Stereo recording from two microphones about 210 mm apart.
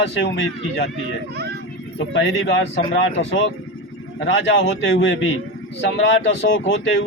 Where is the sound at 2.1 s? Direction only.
65° left (ahead or behind).